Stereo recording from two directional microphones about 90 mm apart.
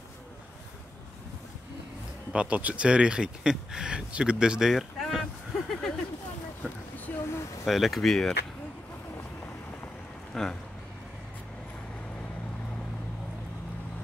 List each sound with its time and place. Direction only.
2.3 s speech: 15° right (ahead or behind); by 5.9 s 5° left (ahead or behind)
7.1 s speech: 15° left (ahead or behind)
7.6 s speech: centre (ahead or behind)
10.3 s speech: 5° left (ahead or behind)